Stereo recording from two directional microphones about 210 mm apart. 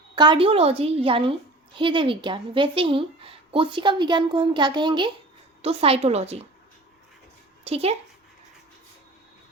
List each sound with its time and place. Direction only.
0.2 s a woman's voice: 25° right (ahead or behind)
7.6 s speech: 30° right (ahead or behind)